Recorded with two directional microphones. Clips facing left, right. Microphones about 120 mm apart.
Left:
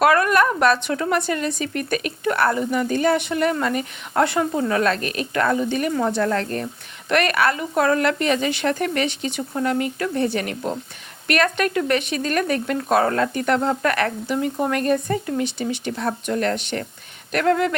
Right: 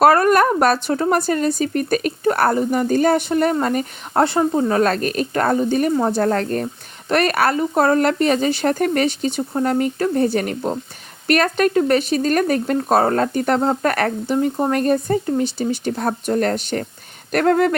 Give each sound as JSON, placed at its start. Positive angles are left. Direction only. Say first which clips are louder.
{"t": 0.0, "sound": "speech", "louder": "right 4 dB", "side_deg": -35}